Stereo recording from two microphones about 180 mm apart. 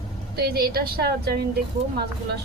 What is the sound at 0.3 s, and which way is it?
A woman's voice, 60° right (ahead or behind).